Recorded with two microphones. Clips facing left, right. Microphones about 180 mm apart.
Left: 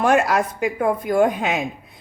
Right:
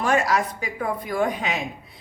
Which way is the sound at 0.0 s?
55° left (ahead or behind).